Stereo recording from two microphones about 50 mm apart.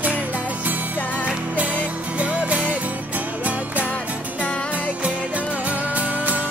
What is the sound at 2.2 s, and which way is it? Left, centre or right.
Music, right.